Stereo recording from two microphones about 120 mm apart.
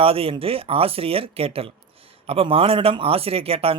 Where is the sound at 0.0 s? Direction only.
50° right (ahead or behind).